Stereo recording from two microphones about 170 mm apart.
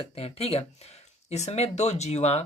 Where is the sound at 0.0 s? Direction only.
35° left (ahead or behind).